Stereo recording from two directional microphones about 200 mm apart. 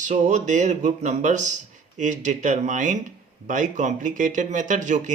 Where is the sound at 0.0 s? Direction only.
40° right (ahead or behind).